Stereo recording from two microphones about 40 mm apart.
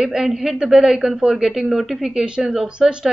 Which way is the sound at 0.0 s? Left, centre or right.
Centre.